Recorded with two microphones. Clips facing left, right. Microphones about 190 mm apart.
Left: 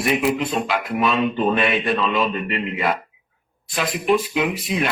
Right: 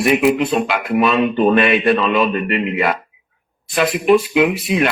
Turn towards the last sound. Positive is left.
turn(degrees=-70)  # may be behind; listen again after turning